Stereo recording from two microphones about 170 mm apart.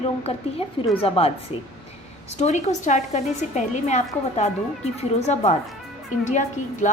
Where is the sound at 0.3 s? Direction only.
35° left (ahead or behind).